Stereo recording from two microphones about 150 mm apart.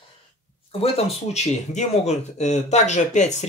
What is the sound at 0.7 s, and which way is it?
Speech, 40° left (ahead or behind).